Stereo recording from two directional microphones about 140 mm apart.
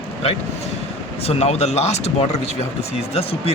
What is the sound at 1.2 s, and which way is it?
Speech, 45° left (ahead or behind).